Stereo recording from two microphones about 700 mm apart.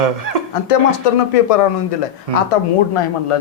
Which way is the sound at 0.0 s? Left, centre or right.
Right.